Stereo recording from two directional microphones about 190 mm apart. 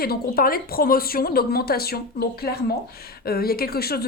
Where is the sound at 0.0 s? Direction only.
50° left (ahead or behind).